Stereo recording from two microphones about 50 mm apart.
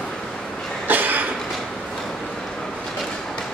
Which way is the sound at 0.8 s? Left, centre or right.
Right.